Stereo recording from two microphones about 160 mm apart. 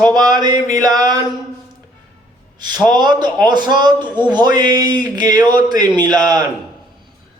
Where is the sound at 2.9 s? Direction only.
25° right (ahead or behind).